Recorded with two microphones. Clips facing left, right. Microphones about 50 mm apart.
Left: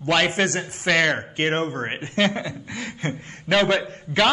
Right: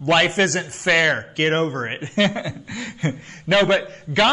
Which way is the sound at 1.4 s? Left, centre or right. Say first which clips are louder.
Right 4 dB; centre.